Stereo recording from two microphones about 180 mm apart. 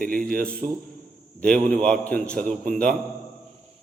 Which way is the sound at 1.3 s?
5° left (ahead or behind).